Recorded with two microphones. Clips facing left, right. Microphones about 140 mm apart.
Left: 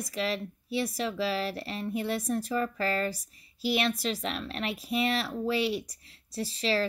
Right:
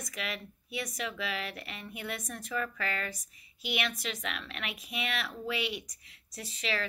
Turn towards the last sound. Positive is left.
turn(degrees=35)  # may be behind; listen again after turning